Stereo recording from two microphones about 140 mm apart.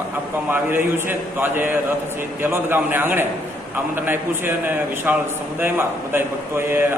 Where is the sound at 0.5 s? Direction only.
15° right (ahead or behind).